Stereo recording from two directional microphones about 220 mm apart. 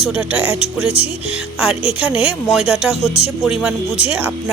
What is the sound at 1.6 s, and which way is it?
Speech, centre (ahead or behind).